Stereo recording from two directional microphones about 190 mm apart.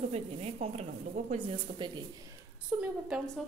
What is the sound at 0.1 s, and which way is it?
Speech, 35° right (ahead or behind).